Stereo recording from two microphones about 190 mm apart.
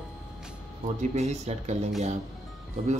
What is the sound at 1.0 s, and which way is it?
Speech, 35° right (ahead or behind).